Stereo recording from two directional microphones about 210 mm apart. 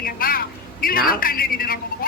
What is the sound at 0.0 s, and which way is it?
A woman's voice, 45° left (ahead or behind).